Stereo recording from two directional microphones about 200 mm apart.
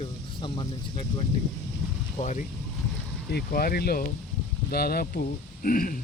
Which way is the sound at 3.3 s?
50° left (ahead or behind).